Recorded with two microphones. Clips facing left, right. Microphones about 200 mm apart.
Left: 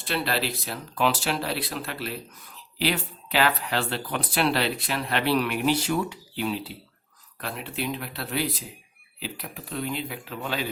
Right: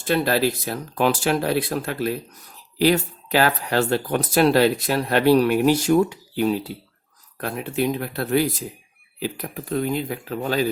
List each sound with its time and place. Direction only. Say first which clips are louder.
0.0 s speech: right 8 dB; 45° right (ahead or behind)